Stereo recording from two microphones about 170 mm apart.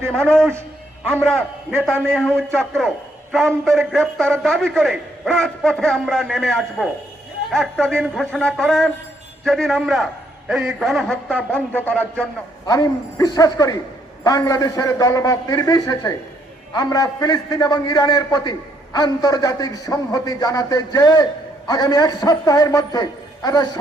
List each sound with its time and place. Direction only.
0.1 s a man's voice: 5° left (ahead or behind)
12.6 s a man's voice: 20° left (ahead or behind)